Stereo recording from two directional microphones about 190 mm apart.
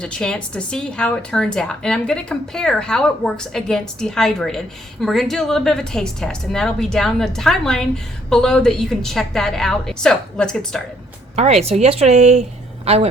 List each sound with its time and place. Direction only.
0.0 s a woman's voice: 5° left (ahead or behind)
11.3 s a woman's voice: 35° right (ahead or behind)